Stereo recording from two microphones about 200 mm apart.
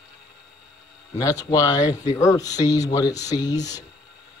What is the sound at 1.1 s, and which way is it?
Speech, 20° left (ahead or behind).